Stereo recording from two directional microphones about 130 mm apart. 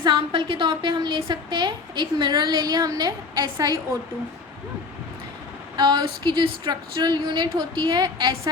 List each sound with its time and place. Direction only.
0.0 s a woman's voice: 35° right (ahead or behind)
5.7 s a woman's voice: 35° right (ahead or behind)